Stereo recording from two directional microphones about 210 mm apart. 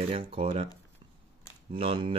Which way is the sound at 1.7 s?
25° right (ahead or behind).